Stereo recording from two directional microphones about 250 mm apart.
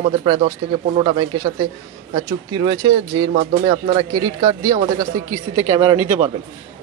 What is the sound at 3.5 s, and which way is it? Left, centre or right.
Speech, right.